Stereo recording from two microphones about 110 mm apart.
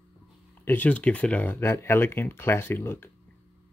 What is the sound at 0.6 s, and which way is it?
Speech, 15° left (ahead or behind).